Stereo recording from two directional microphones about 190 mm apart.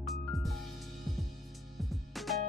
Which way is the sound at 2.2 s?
Centre (ahead or behind).